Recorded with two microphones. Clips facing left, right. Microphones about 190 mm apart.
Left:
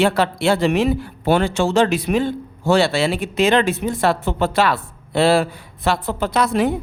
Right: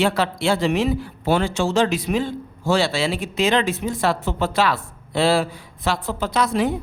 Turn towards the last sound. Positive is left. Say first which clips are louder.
# left 2 dB
turn(degrees=60)  # may be behind; listen again after turning